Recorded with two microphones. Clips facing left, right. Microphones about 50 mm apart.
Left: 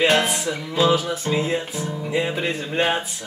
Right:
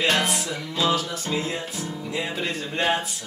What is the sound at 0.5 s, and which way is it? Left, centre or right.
Music, centre.